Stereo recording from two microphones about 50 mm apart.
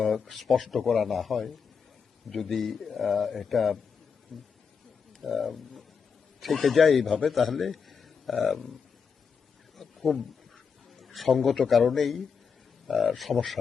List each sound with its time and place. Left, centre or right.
0.3 s a man's voice: centre
9.7 s a sound: centre
10.9 s a man's voice: centre